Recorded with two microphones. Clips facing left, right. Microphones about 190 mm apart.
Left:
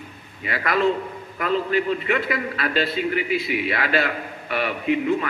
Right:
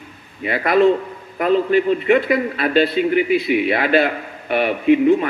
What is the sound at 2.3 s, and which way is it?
A man's voice, 55° right (ahead or behind).